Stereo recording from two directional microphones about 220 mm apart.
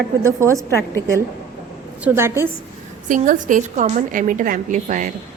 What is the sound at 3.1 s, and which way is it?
A woman's voice, 35° right (ahead or behind).